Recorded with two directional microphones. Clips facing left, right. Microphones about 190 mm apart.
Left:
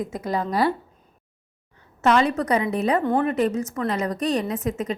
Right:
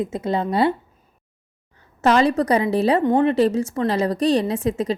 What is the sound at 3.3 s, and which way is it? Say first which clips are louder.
A woman's voice: right 4 dB; 30° right (ahead or behind).